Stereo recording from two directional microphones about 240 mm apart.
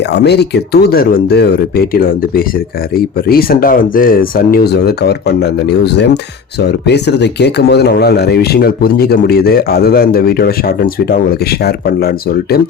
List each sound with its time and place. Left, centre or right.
0.1 s speech: left